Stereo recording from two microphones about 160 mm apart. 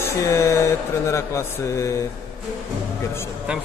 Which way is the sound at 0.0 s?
20° left (ahead or behind).